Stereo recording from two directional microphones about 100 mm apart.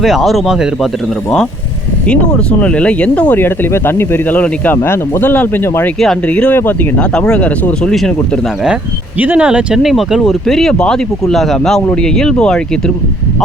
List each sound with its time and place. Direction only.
0.0 s speech: centre (ahead or behind)
2.0 s speech: 10° left (ahead or behind)
8.6 s speech: 10° right (ahead or behind); by 12.5 s 5° left (ahead or behind)